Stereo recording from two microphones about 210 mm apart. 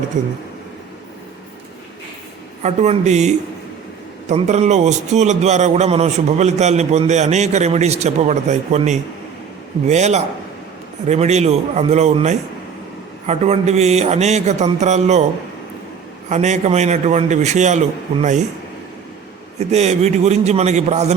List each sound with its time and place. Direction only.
2.6 s a man's voice: 35° right (ahead or behind)
16.3 s a man's voice: 35° right (ahead or behind)
19.5 s a man's voice: 30° right (ahead or behind)